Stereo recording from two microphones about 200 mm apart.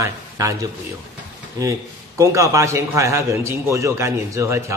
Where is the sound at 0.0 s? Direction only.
15° right (ahead or behind).